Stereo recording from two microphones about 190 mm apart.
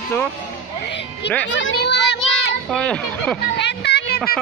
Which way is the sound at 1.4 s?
75° left (ahead or behind).